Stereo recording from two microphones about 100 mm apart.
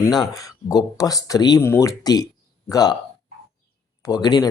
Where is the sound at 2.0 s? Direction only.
40° left (ahead or behind).